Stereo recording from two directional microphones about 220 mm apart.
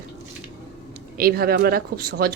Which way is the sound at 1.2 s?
45° right (ahead or behind).